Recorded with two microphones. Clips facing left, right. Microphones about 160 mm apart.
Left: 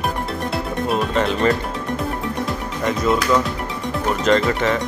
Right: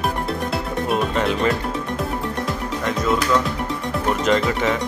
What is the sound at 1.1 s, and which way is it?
Music, centre (ahead or behind).